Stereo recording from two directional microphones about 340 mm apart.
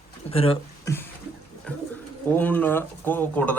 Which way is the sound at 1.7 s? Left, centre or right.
Centre.